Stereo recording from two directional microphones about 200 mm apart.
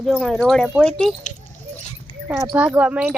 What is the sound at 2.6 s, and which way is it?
Speech, 5° right (ahead or behind).